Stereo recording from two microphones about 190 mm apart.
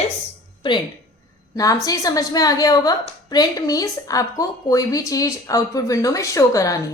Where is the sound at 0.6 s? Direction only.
25° left (ahead or behind).